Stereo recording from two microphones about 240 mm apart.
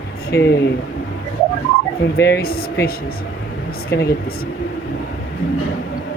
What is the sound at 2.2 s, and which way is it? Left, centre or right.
Speech, left.